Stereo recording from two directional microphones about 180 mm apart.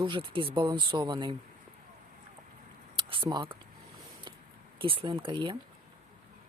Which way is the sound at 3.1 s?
25° right (ahead or behind).